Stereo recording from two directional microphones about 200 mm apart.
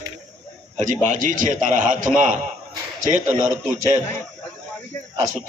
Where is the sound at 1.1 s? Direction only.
40° right (ahead or behind).